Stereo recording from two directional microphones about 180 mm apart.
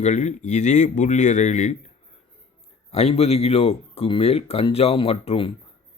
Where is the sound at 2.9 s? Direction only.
35° left (ahead or behind).